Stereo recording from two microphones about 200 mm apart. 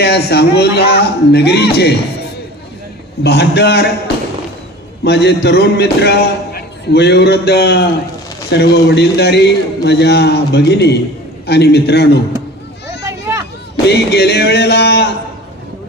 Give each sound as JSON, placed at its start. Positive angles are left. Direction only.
{"t": 0.0, "sound": "a man's voice", "side_deg": 55}
{"t": 3.2, "sound": "a man's voice", "side_deg": 55}
{"t": 13.1, "sound": "a sound", "side_deg": -15}
{"t": 13.8, "sound": "a man's voice", "side_deg": 55}